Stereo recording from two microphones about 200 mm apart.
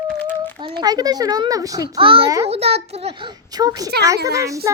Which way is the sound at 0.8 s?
20° right (ahead or behind).